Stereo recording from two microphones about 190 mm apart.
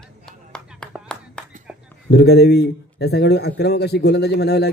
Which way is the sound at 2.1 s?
60° left (ahead or behind).